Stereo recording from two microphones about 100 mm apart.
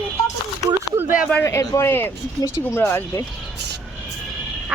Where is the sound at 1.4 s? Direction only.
35° left (ahead or behind).